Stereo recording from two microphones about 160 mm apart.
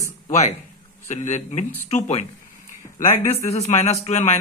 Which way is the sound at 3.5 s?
45° left (ahead or behind).